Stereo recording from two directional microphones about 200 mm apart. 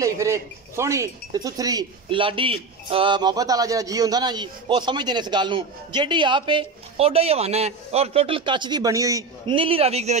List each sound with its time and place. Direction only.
0.0 s speech: 15° right (ahead or behind); by 10.1 s 30° right (ahead or behind)